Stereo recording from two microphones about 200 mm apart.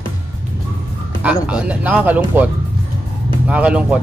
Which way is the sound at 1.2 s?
5° right (ahead or behind).